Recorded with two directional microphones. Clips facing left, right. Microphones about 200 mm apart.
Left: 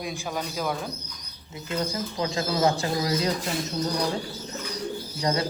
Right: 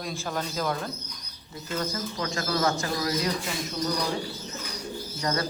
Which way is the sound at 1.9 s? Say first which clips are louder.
Left 3 dB; 30° left (ahead or behind).